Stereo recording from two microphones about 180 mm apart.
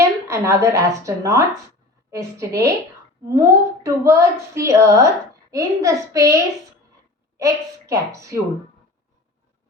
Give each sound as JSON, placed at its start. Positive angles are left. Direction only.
{"t": 0.0, "sound": "a woman's voice", "side_deg": -15}